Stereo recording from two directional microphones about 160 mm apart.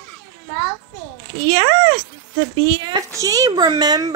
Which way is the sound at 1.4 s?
30° right (ahead or behind).